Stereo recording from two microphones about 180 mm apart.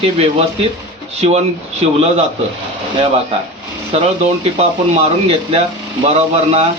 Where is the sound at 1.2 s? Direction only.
35° right (ahead or behind).